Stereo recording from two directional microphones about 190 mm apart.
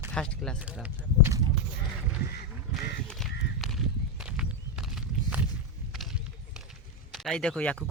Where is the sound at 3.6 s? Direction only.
Centre (ahead or behind).